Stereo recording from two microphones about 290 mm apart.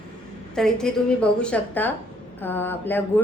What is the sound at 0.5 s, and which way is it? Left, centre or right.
A woman's voice, centre.